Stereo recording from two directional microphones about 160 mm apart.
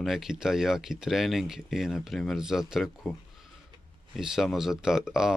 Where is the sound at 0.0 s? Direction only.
Centre (ahead or behind).